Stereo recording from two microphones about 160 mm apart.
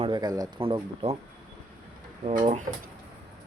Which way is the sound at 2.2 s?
45° right (ahead or behind).